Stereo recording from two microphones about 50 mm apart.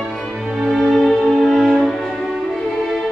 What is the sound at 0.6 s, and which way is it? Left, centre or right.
Music, centre.